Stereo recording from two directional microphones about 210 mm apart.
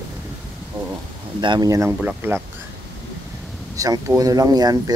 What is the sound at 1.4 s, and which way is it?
Speech, 20° right (ahead or behind).